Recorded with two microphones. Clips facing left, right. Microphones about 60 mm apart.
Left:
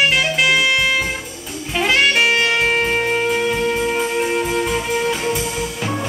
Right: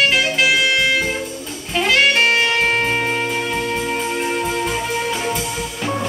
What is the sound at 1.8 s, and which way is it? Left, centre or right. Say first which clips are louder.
Saxophone: even; centre.